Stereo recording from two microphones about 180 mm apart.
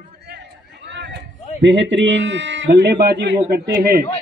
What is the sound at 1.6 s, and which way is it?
A man's voice, 90° right.